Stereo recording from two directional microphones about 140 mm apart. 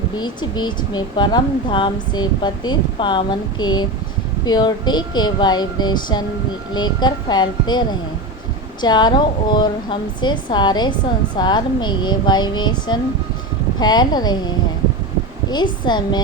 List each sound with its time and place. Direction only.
0.2 s speech: 30° left (ahead or behind)